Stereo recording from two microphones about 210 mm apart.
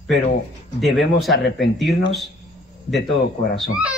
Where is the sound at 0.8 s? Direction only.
Centre (ahead or behind).